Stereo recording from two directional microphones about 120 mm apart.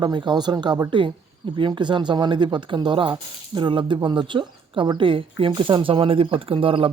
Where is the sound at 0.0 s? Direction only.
40° right (ahead or behind).